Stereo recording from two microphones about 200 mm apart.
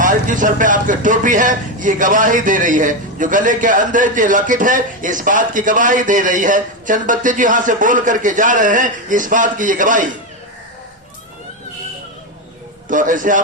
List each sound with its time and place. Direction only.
0.0 s a man's voice: 40° right (ahead or behind)
12.9 s a man's voice: 40° right (ahead or behind)